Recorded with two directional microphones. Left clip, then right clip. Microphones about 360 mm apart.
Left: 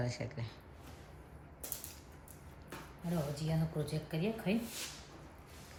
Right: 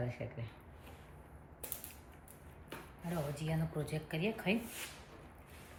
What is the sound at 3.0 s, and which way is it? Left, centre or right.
Speech, centre.